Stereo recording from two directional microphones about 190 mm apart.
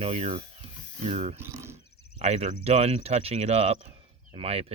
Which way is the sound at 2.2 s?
35° right (ahead or behind).